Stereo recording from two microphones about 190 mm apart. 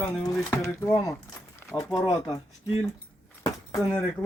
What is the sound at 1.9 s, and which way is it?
Speech, 20° left (ahead or behind).